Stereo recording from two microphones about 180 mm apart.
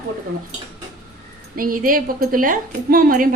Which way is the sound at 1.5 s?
50° right (ahead or behind).